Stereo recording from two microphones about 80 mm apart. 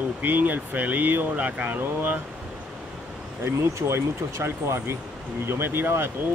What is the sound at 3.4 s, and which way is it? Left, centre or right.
Speech, right.